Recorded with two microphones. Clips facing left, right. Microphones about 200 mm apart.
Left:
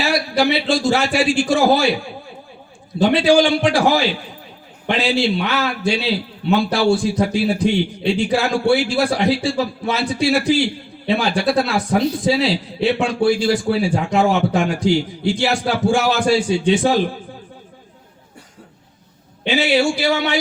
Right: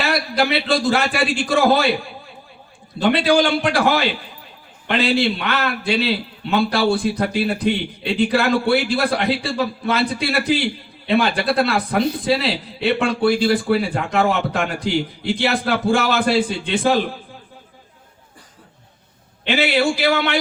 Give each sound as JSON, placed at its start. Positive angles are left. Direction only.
{"t": 0.0, "sound": "a man's voice", "side_deg": -60}
{"t": 3.0, "sound": "a man's voice", "side_deg": -60}
{"t": 19.5, "sound": "a man's voice", "side_deg": -55}